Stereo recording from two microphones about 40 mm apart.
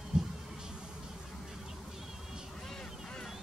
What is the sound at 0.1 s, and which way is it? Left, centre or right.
Heart sounds, right.